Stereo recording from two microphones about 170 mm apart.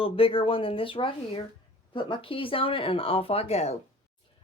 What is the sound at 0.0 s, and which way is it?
Speech, 30° left (ahead or behind).